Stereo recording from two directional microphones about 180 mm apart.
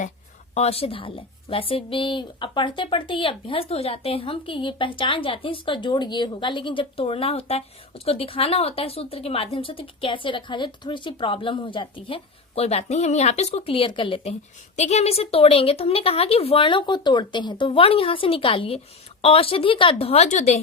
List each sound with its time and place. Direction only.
0.5 s speech: 35° left (ahead or behind)